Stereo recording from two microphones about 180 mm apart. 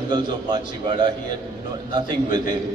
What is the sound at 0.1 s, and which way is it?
A man's voice, 25° right (ahead or behind).